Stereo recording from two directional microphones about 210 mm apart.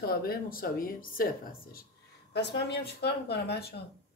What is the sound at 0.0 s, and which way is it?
Speech, 45° left (ahead or behind).